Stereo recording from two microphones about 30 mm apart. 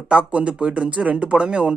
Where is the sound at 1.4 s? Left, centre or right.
Right.